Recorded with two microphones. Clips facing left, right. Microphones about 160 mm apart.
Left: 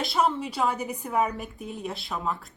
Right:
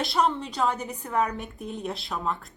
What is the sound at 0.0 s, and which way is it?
Speech, centre (ahead or behind).